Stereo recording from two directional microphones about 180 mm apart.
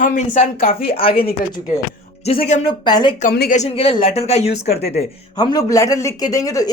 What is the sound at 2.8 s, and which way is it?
Speech, 25° left (ahead or behind).